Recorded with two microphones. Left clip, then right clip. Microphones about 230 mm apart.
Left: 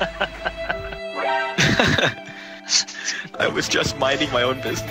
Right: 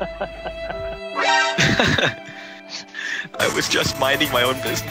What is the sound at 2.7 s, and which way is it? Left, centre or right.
Speech, left.